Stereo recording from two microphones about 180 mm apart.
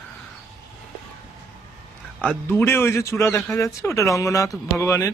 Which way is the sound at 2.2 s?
10° left (ahead or behind).